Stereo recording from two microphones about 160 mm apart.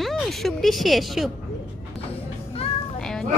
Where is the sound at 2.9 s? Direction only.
5° left (ahead or behind).